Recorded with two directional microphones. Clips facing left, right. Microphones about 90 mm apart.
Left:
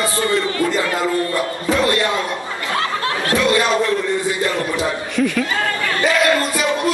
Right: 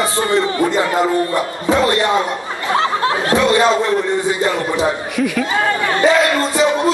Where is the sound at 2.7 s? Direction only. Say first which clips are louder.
Right 5 dB; 25° right (ahead or behind).